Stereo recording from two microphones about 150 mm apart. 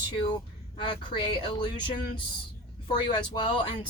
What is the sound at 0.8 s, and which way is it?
Speech, 30° left (ahead or behind).